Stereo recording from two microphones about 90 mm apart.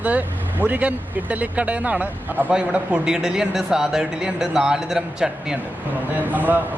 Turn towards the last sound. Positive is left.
turn(degrees=-20)  # may be behind; listen again after turning